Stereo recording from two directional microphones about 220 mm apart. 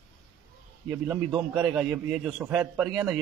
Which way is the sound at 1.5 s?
Centre (ahead or behind).